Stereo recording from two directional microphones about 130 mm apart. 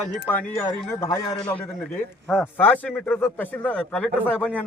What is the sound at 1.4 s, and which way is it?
Speech, 15° left (ahead or behind).